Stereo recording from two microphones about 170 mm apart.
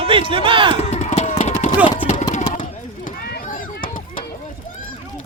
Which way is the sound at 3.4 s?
50° left (ahead or behind).